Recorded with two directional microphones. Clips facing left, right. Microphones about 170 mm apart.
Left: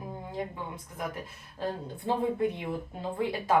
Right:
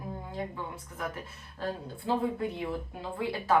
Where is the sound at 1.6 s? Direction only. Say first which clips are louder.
Left 2 dB; 20° left (ahead or behind).